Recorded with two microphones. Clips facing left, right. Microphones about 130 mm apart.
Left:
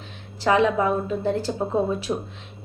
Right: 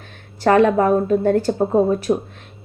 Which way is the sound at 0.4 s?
50° right (ahead or behind).